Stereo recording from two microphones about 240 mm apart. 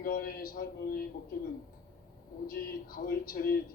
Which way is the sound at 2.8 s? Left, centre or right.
Left.